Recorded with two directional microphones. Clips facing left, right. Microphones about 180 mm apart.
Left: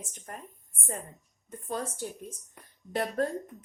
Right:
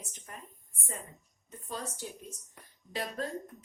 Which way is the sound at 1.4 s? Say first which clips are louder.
Left 5 dB; 50° left (ahead or behind).